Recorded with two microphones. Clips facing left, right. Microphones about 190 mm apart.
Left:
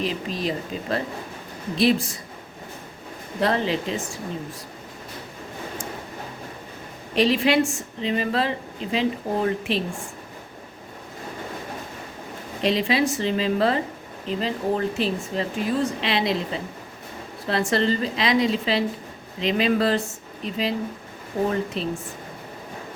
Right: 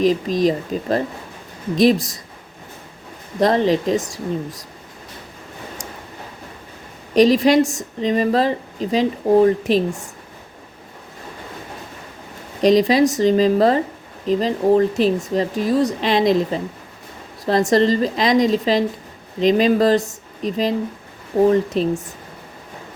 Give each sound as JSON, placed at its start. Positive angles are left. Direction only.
{"t": 0.0, "sound": "a woman's voice", "side_deg": -40}
{"t": 3.4, "sound": "a woman's voice", "side_deg": -40}
{"t": 7.2, "sound": "a woman's voice", "side_deg": -40}
{"t": 12.6, "sound": "a woman's voice", "side_deg": -40}